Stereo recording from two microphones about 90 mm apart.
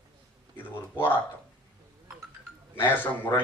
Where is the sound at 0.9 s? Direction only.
25° left (ahead or behind).